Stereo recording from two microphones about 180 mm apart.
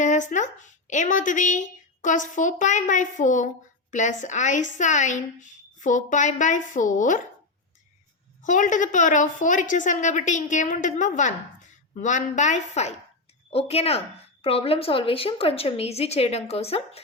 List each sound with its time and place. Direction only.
0.0 s speech: 45° left (ahead or behind)
8.4 s a woman's voice: 45° left (ahead or behind)